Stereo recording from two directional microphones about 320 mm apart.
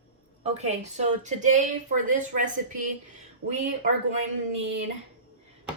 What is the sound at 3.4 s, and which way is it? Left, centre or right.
Speech, right.